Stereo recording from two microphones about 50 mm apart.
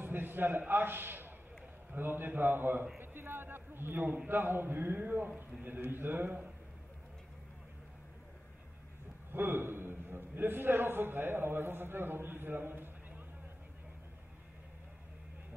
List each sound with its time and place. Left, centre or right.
0.0 s a sound: right
2.0 s a man's voice: right
9.3 s a man's voice: right